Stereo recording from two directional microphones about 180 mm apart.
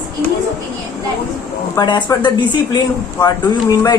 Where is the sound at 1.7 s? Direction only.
25° left (ahead or behind).